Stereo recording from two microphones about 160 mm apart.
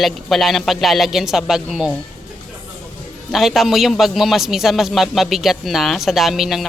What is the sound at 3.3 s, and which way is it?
A man's voice, centre (ahead or behind).